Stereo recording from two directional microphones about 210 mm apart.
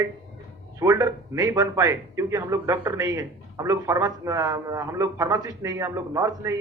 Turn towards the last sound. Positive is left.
turn(degrees=-15)  # may be behind; listen again after turning